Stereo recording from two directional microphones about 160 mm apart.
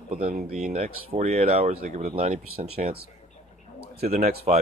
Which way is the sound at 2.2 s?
40° right (ahead or behind).